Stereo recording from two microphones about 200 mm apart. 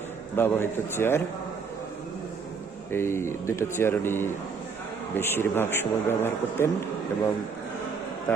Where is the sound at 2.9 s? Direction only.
10° left (ahead or behind).